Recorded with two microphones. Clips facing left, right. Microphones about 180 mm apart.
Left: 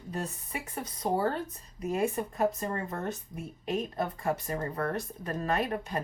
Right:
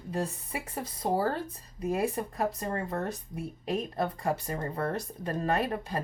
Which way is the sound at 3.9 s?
30° right (ahead or behind).